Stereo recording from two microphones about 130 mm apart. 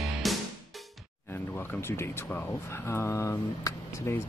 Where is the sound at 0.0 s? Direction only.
Centre (ahead or behind).